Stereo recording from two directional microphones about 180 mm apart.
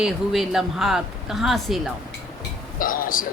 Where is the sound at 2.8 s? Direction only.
50° left (ahead or behind).